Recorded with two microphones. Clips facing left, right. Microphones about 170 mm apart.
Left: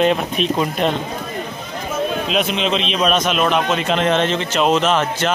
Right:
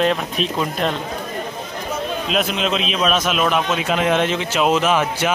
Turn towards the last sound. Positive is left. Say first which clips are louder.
# left 1 dB
turn(degrees=-10)  # may be behind; listen again after turning